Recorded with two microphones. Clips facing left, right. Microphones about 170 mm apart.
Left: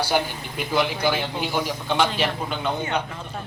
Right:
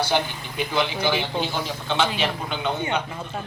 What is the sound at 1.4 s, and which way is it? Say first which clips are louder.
Speech: left 1 dB; 10° left (ahead or behind).